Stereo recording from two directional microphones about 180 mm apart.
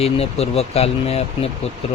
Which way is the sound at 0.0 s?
35° left (ahead or behind).